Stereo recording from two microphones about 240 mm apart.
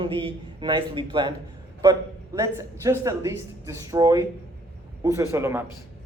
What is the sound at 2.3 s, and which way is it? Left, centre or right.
Speech, centre.